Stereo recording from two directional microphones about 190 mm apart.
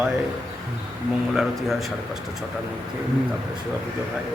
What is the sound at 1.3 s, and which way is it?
Speech, centre (ahead or behind).